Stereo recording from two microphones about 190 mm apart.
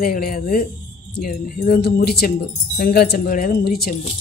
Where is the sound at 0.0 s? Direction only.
50° left (ahead or behind).